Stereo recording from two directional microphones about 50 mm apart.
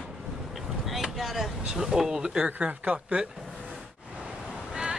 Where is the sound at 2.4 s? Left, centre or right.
Right.